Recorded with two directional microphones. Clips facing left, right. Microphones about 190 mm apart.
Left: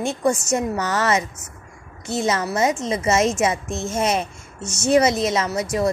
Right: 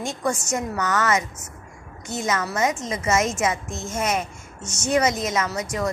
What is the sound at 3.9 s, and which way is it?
A woman's voice, 30° left (ahead or behind).